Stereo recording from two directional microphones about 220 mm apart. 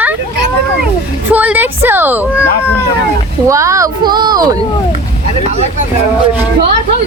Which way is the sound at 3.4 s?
15° right (ahead or behind).